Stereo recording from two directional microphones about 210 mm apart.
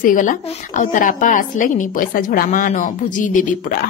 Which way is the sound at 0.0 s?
40° left (ahead or behind).